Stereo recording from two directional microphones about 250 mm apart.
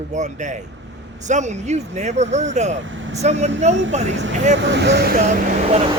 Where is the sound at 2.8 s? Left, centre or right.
Right.